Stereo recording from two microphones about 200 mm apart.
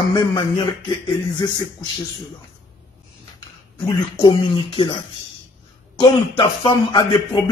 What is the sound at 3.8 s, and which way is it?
A man's voice, 20° left (ahead or behind).